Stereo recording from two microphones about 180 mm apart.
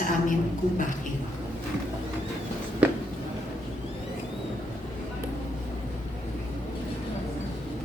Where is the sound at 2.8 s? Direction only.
10° right (ahead or behind).